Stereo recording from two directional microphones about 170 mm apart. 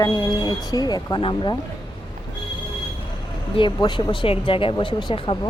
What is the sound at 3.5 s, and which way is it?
Speech, 30° left (ahead or behind).